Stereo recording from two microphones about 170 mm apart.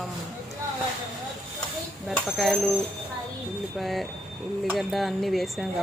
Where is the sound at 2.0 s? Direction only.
Centre (ahead or behind).